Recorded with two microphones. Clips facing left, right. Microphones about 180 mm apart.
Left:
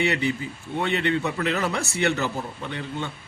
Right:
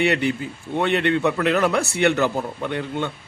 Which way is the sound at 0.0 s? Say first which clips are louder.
Right 4 dB; 60° right (ahead or behind).